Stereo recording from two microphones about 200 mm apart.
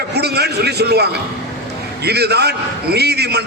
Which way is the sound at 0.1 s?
55° right (ahead or behind).